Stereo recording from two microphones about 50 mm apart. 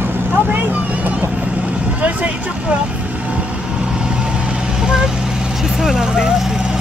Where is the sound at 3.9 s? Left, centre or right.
Centre.